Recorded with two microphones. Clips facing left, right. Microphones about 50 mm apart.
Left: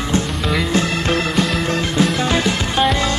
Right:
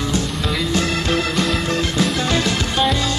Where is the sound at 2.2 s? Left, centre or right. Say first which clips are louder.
Left 2 dB; left.